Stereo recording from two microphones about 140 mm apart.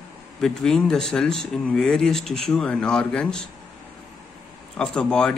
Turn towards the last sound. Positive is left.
turn(degrees=5)  # may be behind; listen again after turning